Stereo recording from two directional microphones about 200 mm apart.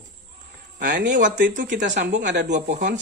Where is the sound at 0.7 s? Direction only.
45° right (ahead or behind).